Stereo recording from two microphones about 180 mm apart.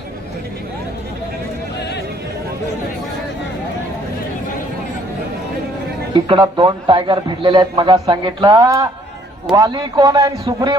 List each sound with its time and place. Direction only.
6.2 s a man's voice: 25° right (ahead or behind)